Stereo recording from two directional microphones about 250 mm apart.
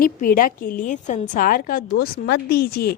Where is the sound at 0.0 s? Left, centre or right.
Left.